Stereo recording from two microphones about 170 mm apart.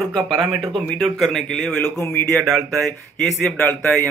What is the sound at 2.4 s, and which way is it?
Speech, 5° left (ahead or behind).